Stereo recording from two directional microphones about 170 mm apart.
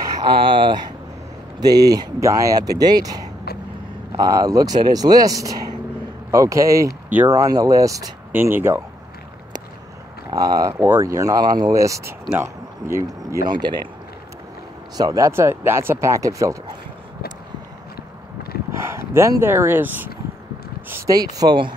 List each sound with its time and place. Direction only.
0.2 s speech: 30° right (ahead or behind); by 8.8 s 15° right (ahead or behind)
10.3 s speech: 20° right (ahead or behind)
15.0 s speech: 20° right (ahead or behind)
18.7 s speech: 15° right (ahead or behind)